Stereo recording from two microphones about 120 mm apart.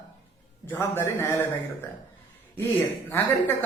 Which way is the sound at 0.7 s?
20° left (ahead or behind).